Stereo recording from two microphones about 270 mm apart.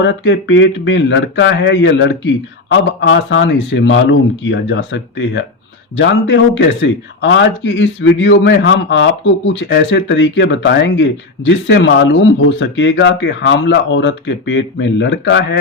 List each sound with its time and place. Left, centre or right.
0.0 s a man's voice: left